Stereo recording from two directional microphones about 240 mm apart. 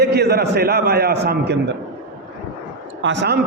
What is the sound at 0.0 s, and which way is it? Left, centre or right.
A man's voice, right.